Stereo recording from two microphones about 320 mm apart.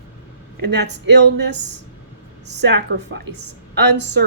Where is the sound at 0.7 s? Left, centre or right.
Right.